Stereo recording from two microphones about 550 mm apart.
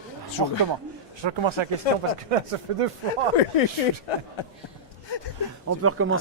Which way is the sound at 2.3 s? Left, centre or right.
Right.